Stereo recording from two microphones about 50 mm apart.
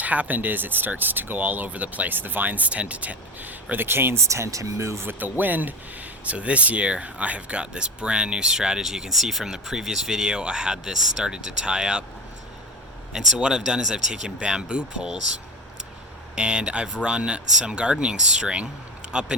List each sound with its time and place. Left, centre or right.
0.0 s speech: right
3.8 s speech: right
4.3 s speech: right
5.0 s speech: right; by 12.0 s centre
13.1 s speech: centre
16.3 s speech: centre